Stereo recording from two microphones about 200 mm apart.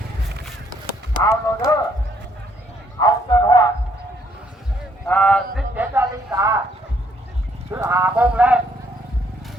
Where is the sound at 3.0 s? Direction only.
20° left (ahead or behind).